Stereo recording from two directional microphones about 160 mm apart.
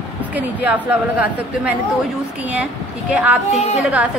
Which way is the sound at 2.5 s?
10° right (ahead or behind).